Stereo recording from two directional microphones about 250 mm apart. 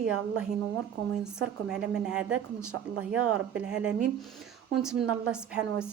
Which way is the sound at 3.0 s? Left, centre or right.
Right.